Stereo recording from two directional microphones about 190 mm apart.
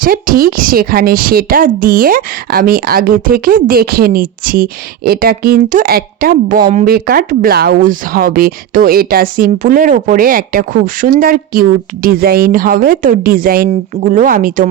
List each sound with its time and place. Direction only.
0.0 s a woman's voice: 50° right (ahead or behind)